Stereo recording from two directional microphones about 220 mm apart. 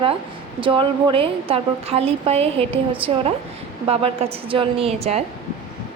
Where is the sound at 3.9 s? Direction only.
25° right (ahead or behind).